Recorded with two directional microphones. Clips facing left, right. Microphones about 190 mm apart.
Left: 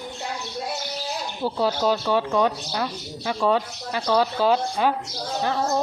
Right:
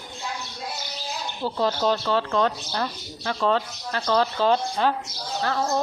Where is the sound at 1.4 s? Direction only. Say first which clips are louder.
Left 1 dB; 10° left (ahead or behind).